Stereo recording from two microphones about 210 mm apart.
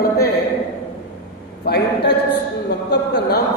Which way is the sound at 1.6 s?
50° left (ahead or behind).